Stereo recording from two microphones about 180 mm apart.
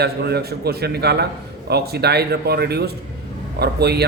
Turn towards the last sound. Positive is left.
turn(degrees=-65)  # may be behind; listen again after turning